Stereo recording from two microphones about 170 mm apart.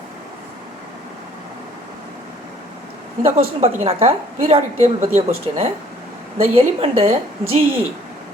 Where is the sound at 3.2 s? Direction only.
35° right (ahead or behind).